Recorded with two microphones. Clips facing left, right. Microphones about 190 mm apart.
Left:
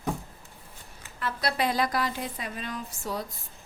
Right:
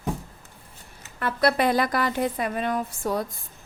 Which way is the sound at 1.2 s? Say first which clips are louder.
Right 6 dB; 55° right (ahead or behind).